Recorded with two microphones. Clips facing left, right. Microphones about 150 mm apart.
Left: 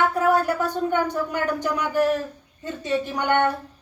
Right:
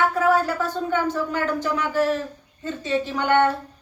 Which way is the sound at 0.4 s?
15° left (ahead or behind).